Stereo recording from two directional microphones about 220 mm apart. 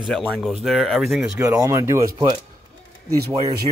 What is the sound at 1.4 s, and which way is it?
Speech, 15° right (ahead or behind).